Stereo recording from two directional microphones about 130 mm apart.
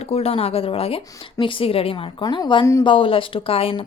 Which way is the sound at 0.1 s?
50° left (ahead or behind).